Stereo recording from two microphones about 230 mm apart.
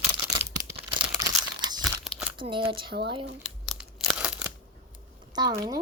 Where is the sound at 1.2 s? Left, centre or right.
Centre.